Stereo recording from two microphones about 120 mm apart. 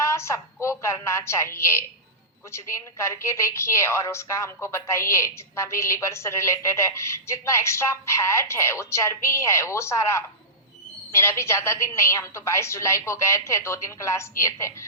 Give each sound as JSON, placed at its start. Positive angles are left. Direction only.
{"t": 0.0, "sound": "a woman's voice", "side_deg": 25}